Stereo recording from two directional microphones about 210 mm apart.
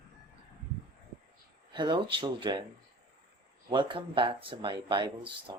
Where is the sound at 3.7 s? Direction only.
20° right (ahead or behind).